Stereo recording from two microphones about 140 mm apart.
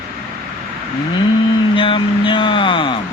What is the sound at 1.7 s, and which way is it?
Speech, 40° left (ahead or behind).